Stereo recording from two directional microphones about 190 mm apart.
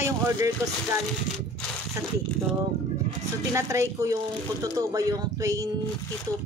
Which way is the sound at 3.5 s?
15° right (ahead or behind).